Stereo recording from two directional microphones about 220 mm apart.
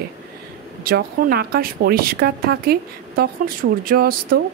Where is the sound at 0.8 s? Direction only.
40° right (ahead or behind).